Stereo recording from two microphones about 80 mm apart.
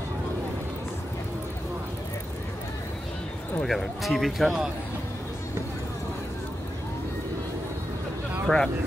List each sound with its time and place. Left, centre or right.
3.6 s speech: centre
8.5 s speech: centre